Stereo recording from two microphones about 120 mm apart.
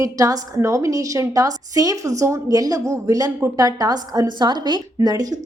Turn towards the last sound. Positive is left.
turn(degrees=-35)  # may be behind; listen again after turning